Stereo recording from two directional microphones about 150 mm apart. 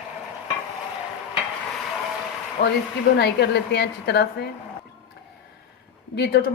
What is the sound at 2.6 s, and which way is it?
Speech, 90° left.